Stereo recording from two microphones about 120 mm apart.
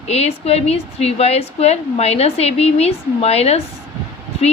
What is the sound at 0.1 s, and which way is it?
A woman's voice, 60° left (ahead or behind).